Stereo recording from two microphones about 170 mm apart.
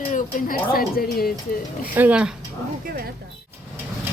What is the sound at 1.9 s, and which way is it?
Speech, 10° right (ahead or behind).